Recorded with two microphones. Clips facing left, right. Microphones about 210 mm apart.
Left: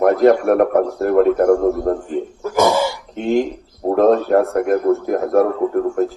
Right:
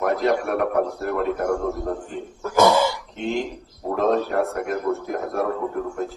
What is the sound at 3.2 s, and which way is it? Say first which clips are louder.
A man's voice: left 10 dB; 45° left (ahead or behind).